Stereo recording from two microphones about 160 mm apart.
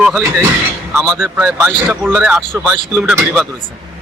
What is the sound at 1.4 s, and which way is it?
Speech, 10° right (ahead or behind).